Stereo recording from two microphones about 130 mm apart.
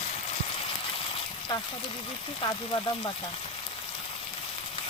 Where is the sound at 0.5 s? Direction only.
45° left (ahead or behind).